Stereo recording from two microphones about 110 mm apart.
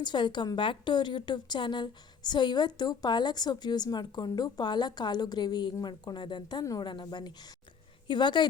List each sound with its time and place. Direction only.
0.0 s a woman's voice: 45° left (ahead or behind)